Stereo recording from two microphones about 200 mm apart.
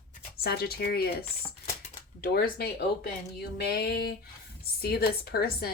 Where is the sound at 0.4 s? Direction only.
50° left (ahead or behind).